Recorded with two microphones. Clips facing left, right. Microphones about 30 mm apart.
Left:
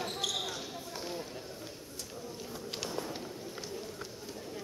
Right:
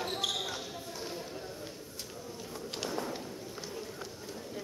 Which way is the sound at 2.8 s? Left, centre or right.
Centre.